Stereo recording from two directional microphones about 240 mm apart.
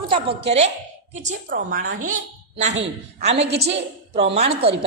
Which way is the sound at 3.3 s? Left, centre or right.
Right.